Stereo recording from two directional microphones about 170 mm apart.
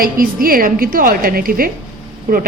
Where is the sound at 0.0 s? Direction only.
55° right (ahead or behind).